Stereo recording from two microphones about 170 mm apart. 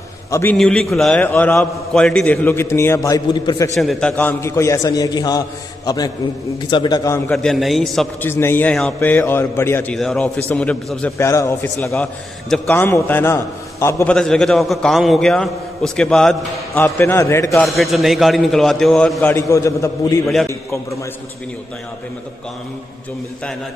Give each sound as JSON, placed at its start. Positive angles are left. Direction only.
{"t": 0.3, "sound": "a man's voice", "side_deg": 15}
{"t": 3.7, "sound": "a man's voice", "side_deg": 5}
{"t": 7.2, "sound": "a man's voice", "side_deg": 5}
{"t": 8.3, "sound": "a man's voice", "side_deg": 15}
{"t": 11.9, "sound": "a man's voice", "side_deg": 5}
{"t": 14.1, "sound": "a man's voice", "side_deg": 5}
{"t": 16.7, "sound": "a man's voice", "side_deg": 15}
{"t": 17.6, "sound": "a man's voice", "side_deg": 0}